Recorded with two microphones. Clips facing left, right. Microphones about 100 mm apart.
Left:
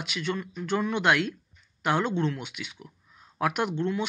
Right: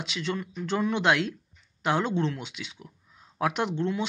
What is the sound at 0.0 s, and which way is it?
Speech, 25° right (ahead or behind).